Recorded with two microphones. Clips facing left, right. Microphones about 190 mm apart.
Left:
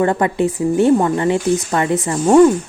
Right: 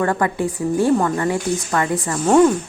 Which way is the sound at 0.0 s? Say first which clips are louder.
Left 4 dB; 20° left (ahead or behind).